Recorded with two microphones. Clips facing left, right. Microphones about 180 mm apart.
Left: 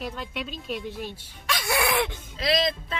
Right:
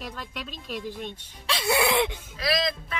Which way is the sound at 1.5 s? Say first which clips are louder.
Right 2 dB; 25° right (ahead or behind).